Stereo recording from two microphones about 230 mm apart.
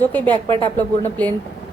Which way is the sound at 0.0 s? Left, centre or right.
Centre.